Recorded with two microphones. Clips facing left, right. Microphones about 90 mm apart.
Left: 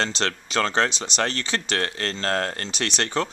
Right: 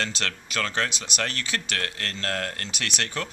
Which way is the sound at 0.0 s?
30° left (ahead or behind).